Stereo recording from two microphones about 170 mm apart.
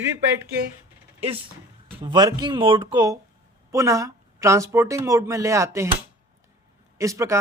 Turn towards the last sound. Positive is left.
turn(degrees=-15)  # may be behind; listen again after turning